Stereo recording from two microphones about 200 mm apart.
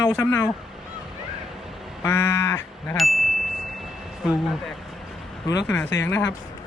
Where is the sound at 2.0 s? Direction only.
10° left (ahead or behind).